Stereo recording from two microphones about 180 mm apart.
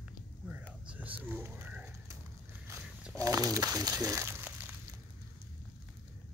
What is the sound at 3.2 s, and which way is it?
Speech, 20° right (ahead or behind).